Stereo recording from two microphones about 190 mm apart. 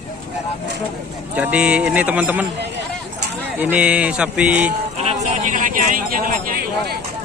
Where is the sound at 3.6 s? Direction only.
10° right (ahead or behind).